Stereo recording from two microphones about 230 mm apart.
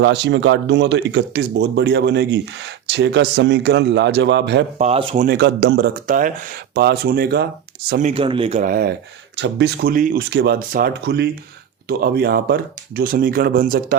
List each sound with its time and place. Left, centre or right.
0.0 s speech: right
4.8 s speech: right
8.1 s speech: right